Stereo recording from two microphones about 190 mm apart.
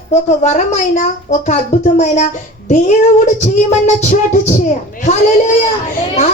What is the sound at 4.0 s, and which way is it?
Speech, 35° left (ahead or behind).